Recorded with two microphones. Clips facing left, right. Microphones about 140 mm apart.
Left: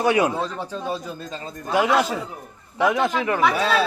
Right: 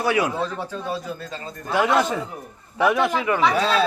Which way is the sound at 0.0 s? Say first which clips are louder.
Left 2 dB; 20° left (ahead or behind).